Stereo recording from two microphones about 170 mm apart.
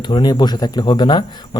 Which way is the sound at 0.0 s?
25° left (ahead or behind).